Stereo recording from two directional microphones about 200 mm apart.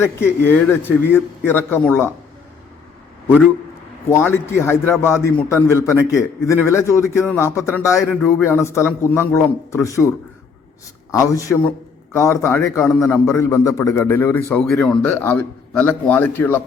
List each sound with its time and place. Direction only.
0.4 s a man's voice: 10° left (ahead or behind)
3.2 s a man's voice: 5° right (ahead or behind)
4.1 s a man's voice: 10° left (ahead or behind)
11.1 s a man's voice: 15° left (ahead or behind)